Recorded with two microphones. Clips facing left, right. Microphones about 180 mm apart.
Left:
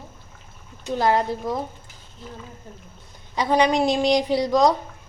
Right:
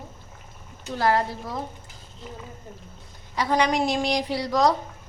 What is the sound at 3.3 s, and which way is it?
A woman's voice, 20° left (ahead or behind).